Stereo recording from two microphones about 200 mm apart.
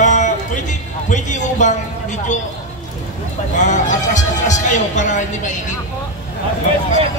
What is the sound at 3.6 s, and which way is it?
Music, 40° left (ahead or behind).